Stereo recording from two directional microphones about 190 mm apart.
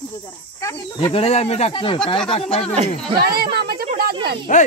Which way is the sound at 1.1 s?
30° left (ahead or behind).